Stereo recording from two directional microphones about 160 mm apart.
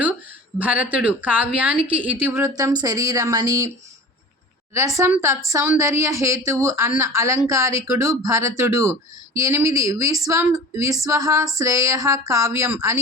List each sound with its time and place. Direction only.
0.6 s a woman's voice: 10° right (ahead or behind)
4.9 s a woman's voice: 15° right (ahead or behind)